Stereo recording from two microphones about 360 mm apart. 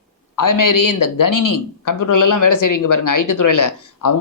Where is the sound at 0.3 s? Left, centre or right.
Left.